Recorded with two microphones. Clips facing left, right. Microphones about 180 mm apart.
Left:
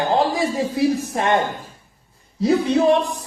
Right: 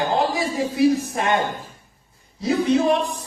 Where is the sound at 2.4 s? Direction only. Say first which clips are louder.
Left 2 dB; 30° left (ahead or behind).